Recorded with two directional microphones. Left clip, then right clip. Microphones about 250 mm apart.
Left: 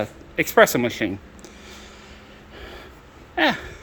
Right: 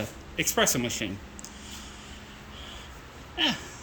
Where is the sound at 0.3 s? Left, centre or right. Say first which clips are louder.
Left 10 dB; centre.